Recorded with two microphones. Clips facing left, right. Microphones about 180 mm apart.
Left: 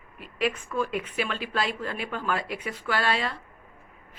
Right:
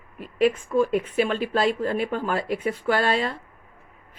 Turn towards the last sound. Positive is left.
turn(degrees=-45)  # may be behind; listen again after turning